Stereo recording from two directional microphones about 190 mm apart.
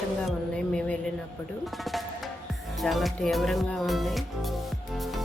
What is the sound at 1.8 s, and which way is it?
Music, centre (ahead or behind).